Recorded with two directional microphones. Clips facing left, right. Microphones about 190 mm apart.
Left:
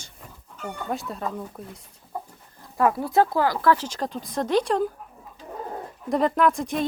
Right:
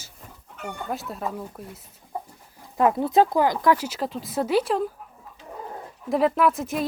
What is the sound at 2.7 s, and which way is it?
Speech, 20° right (ahead or behind).